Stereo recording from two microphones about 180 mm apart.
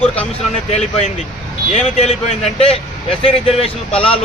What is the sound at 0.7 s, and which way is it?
Speech, 35° left (ahead or behind).